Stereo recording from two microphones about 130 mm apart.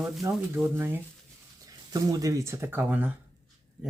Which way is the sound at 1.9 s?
30° right (ahead or behind).